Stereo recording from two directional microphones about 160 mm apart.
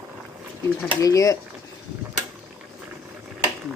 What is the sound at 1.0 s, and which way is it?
Speech, 20° left (ahead or behind).